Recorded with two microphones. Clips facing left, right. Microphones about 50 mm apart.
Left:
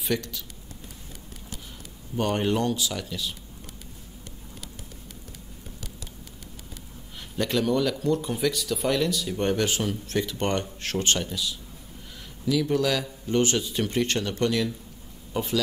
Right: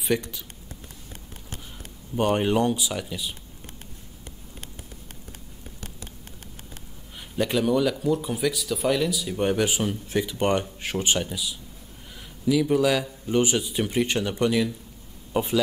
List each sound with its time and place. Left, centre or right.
0.0 s speech: centre
2.1 s speech: centre
7.3 s speech: centre